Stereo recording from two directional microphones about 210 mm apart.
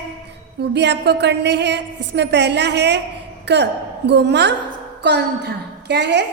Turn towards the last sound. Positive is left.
turn(degrees=-55)  # may be behind; listen again after turning